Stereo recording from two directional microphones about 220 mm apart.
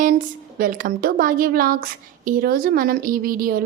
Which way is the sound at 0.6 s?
40° right (ahead or behind).